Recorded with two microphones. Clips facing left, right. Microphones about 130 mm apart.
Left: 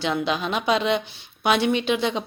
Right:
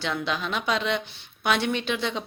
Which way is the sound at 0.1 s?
20° left (ahead or behind).